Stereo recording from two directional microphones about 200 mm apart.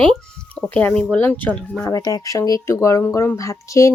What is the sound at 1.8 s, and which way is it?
Speech, 20° left (ahead or behind).